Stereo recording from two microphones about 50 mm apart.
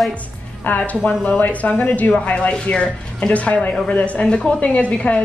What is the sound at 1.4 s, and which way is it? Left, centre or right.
A woman's voice, left.